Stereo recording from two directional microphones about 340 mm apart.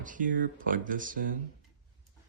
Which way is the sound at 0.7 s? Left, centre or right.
Right.